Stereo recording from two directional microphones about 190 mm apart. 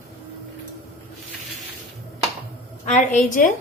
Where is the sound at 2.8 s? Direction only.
40° left (ahead or behind).